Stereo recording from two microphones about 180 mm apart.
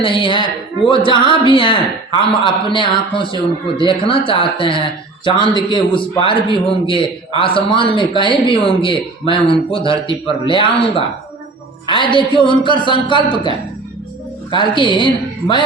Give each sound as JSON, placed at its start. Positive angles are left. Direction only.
{"t": 0.0, "sound": "a man's voice", "side_deg": 30}
{"t": 14.5, "sound": "a man's voice", "side_deg": 25}